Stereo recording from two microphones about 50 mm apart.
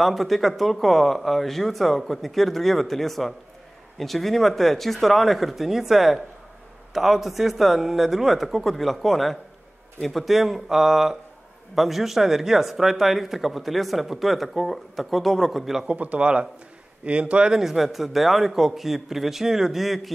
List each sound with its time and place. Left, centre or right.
0.0 s speech: centre
15.9 s a man's voice: right
17.6 s speech: centre